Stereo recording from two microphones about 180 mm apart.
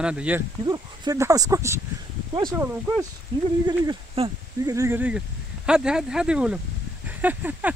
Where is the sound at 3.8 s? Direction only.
30° right (ahead or behind).